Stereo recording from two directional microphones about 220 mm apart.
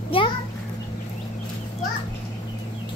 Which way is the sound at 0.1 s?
25° left (ahead or behind).